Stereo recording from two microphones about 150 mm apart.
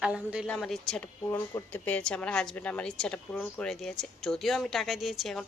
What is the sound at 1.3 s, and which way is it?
A woman's voice, 15° left (ahead or behind).